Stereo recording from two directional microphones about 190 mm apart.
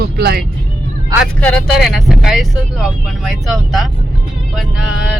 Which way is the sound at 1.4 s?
5° left (ahead or behind).